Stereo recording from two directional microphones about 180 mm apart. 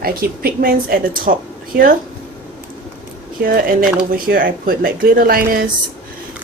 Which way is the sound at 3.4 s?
50° right (ahead or behind).